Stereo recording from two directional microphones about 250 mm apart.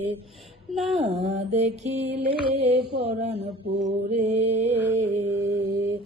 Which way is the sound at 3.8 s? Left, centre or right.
Right.